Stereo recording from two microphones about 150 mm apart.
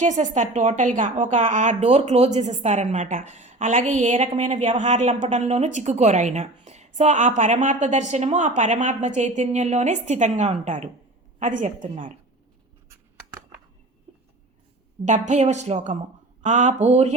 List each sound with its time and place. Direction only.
0.0 s a woman's voice: 55° right (ahead or behind)
15.0 s a woman's voice: 55° right (ahead or behind)